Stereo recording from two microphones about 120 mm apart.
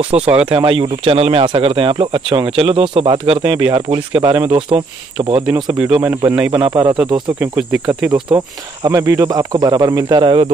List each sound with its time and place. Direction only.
0.1 s speech: 60° right (ahead or behind)
0.5 s speech: 45° right (ahead or behind)
5.7 s speech: 10° right (ahead or behind)
6.6 s speech: 35° right (ahead or behind)
7.3 s speech: 10° right (ahead or behind)
8.8 s speech: 25° right (ahead or behind); by 10.5 s 45° right (ahead or behind)